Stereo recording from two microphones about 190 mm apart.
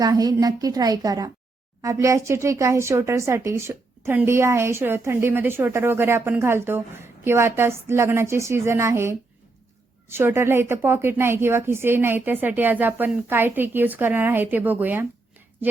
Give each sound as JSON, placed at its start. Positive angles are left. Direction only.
{"t": 0.0, "sound": "a woman's voice", "side_deg": -20}